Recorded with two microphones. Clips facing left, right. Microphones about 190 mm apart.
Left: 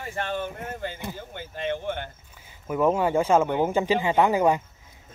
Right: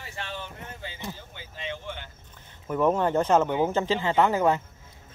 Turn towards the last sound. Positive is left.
turn(degrees=15)  # may be behind; listen again after turning